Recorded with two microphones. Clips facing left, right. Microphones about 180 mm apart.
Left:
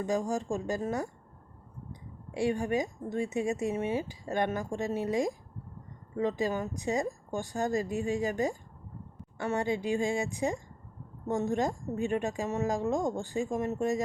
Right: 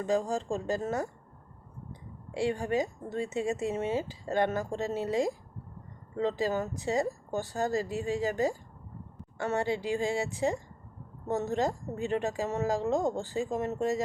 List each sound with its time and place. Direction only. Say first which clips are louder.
0.0 s speech: right 1 dB; 15° left (ahead or behind)